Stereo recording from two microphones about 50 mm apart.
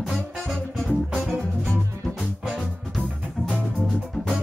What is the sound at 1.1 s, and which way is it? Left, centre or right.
Music, centre.